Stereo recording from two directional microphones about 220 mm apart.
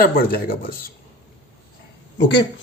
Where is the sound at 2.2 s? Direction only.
50° left (ahead or behind).